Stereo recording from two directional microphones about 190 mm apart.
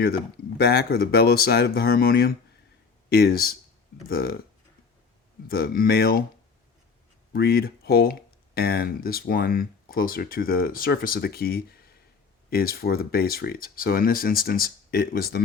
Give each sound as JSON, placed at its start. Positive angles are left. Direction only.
{"t": 0.6, "sound": "speech", "side_deg": 55}
{"t": 5.5, "sound": "speech", "side_deg": 50}
{"t": 7.3, "sound": "speech", "side_deg": 55}